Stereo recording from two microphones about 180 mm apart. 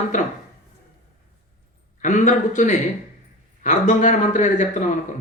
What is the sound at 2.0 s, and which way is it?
A man's voice, 45° left (ahead or behind).